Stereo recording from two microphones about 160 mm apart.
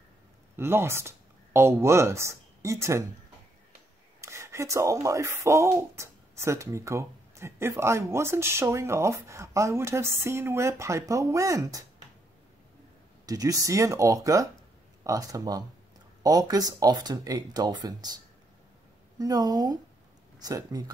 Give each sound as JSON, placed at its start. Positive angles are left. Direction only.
{"t": 0.6, "sound": "speech", "side_deg": -15}
{"t": 4.2, "sound": "speech", "side_deg": -20}
{"t": 13.2, "sound": "speech", "side_deg": -20}